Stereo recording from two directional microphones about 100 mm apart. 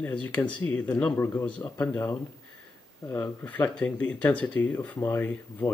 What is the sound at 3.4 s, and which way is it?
A man's voice, 15° left (ahead or behind).